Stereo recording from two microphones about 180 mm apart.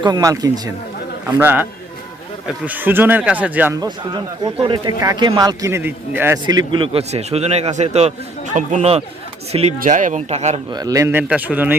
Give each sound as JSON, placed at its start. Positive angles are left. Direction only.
{"t": 0.0, "sound": "a man's voice", "side_deg": -20}
{"t": 2.6, "sound": "a man's voice", "side_deg": -10}
{"t": 3.8, "sound": "a man's voice", "side_deg": -20}
{"t": 6.4, "sound": "a man's voice", "side_deg": -25}
{"t": 9.7, "sound": "a man's voice", "side_deg": -50}
{"t": 10.7, "sound": "a man's voice", "side_deg": -20}